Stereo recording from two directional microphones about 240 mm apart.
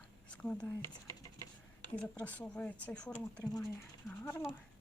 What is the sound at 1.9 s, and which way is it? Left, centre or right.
Speech, centre.